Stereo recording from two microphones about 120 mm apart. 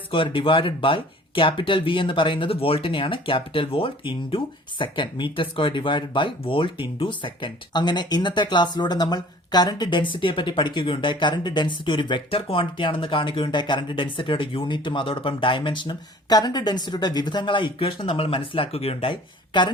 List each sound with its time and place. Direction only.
0.1 s speech: 45° left (ahead or behind)
19.5 s a woman's voice: 40° left (ahead or behind)